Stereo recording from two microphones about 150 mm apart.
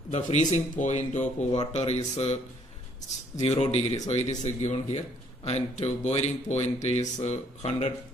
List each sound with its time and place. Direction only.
0.1 s speech: 50° left (ahead or behind)
3.3 s speech: 40° left (ahead or behind)